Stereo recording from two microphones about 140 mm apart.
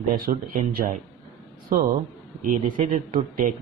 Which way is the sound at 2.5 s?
75° right (ahead or behind).